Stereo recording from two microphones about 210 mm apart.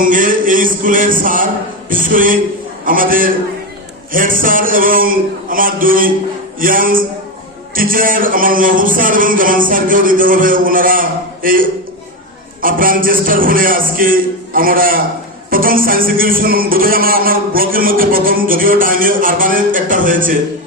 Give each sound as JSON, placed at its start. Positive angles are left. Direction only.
{"t": 0.0, "sound": "music", "side_deg": -40}
{"t": 15.4, "sound": "speech", "side_deg": -40}